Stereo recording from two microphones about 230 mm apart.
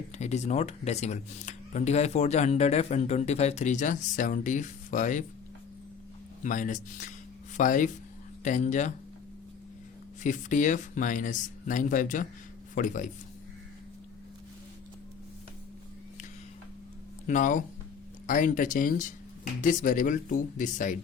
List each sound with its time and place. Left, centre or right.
0.2 s speech: left
6.4 s speech: left
10.2 s speech: left
17.2 s speech: left